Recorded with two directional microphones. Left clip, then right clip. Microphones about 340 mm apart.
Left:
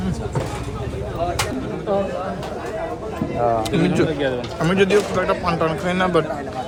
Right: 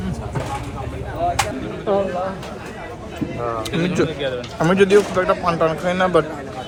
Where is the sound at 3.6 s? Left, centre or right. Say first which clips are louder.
Left 1 dB; centre.